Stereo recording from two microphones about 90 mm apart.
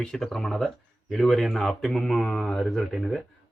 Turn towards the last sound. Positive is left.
turn(degrees=0)  # may be behind; listen again after turning